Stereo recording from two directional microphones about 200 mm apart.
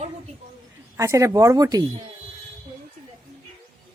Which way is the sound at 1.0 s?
15° right (ahead or behind).